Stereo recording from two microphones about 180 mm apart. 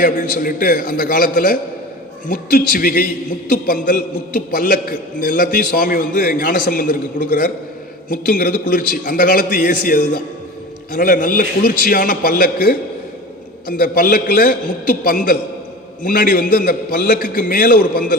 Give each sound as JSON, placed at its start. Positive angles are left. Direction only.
{"t": 0.0, "sound": "a man's voice", "side_deg": 50}
{"t": 13.7, "sound": "a man's voice", "side_deg": 50}